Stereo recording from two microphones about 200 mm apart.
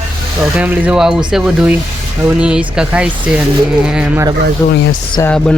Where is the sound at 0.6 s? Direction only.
5° right (ahead or behind).